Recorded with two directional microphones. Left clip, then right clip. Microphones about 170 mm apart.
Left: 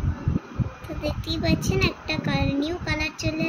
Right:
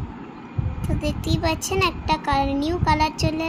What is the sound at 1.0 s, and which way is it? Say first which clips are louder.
Child singing: right 2 dB; 70° right (ahead or behind).